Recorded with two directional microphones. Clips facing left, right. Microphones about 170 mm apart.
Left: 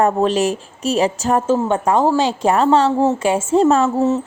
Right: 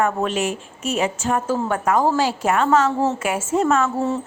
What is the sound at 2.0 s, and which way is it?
Speech, 15° left (ahead or behind).